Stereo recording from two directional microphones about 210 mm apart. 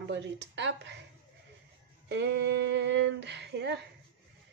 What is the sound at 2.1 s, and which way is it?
Speech, 55° right (ahead or behind).